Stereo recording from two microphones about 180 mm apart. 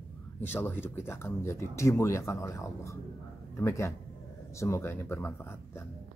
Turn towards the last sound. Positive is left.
turn(degrees=10)  # may be behind; listen again after turning